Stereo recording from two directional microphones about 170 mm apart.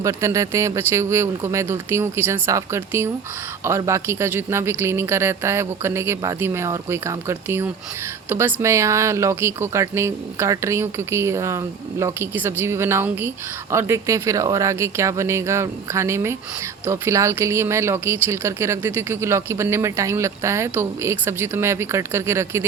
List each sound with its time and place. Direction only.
0.0 s speech: 15° right (ahead or behind)